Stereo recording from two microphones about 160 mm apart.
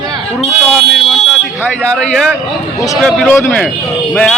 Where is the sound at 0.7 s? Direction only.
Centre (ahead or behind).